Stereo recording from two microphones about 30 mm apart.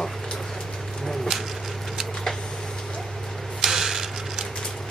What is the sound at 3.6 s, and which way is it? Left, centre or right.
Mechanisms, centre.